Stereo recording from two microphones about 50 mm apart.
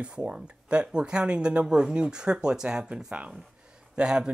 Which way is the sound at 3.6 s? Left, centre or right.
Centre.